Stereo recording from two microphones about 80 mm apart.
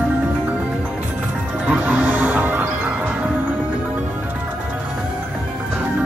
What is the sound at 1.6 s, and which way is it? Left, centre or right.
Music, centre.